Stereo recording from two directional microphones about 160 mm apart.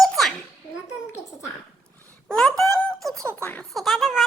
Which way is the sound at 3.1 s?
20° right (ahead or behind).